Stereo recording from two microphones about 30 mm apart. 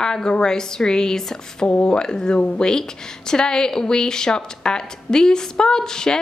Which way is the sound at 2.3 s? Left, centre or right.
Left.